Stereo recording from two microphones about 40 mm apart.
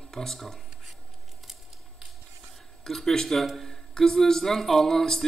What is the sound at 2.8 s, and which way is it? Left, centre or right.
Speech, centre.